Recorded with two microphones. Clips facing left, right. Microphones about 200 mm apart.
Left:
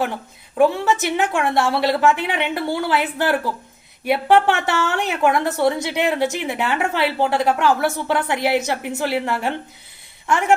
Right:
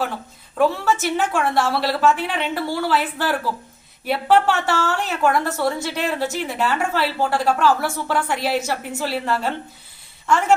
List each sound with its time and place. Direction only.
0.6 s a woman's voice: 15° left (ahead or behind)